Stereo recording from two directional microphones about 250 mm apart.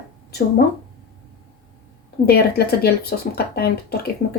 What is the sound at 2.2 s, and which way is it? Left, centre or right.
Speech, left.